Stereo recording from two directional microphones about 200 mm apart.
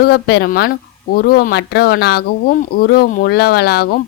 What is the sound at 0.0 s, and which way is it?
Speech, 50° left (ahead or behind).